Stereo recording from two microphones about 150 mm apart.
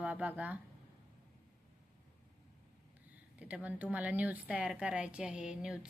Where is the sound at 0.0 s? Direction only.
10° right (ahead or behind).